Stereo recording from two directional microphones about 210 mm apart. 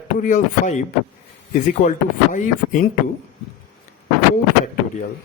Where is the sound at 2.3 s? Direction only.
40° left (ahead or behind).